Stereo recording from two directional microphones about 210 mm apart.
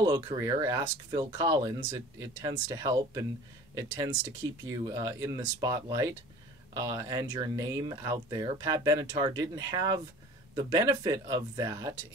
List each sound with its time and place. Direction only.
0.0 s speech: 20° right (ahead or behind)
4.8 s speech: 15° right (ahead or behind)